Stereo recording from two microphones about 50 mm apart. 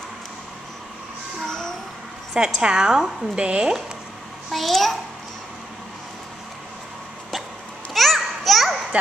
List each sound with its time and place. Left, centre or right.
1.5 s music: centre
2.3 s a woman's voice: centre
3.3 s speech: right
4.5 s a child's voice: centre
7.9 s children playing: centre
8.9 s speech: right